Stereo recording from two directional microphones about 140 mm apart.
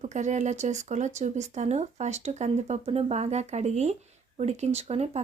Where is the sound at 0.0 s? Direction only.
60° right (ahead or behind).